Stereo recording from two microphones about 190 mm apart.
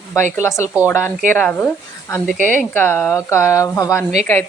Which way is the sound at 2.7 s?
10° left (ahead or behind).